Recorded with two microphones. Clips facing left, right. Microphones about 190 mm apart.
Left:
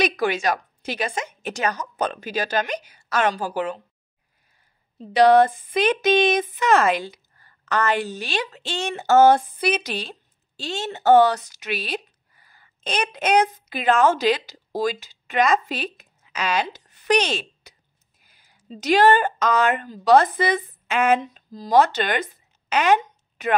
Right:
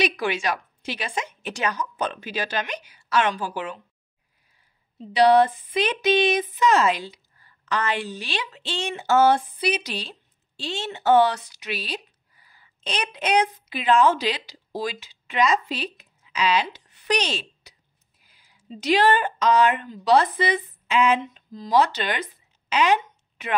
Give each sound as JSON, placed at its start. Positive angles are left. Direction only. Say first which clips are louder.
{"t": 0.0, "sound": "a woman's voice", "louder": "left 3 dB", "side_deg": 45}
{"t": 5.1, "sound": "a woman's voice", "louder": "left 2 dB", "side_deg": 45}